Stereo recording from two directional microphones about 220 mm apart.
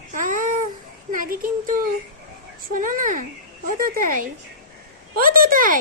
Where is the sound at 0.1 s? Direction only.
35° right (ahead or behind).